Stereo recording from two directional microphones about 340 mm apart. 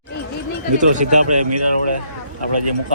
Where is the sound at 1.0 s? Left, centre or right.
Right.